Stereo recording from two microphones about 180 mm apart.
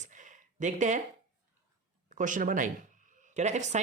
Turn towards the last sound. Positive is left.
turn(degrees=-40)  # may be behind; listen again after turning